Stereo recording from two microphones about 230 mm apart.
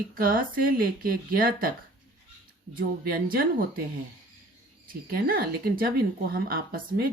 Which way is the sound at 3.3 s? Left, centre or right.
Right.